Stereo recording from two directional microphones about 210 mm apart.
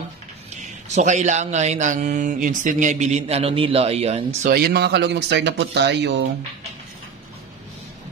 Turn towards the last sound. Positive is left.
turn(degrees=-55)  # may be behind; listen again after turning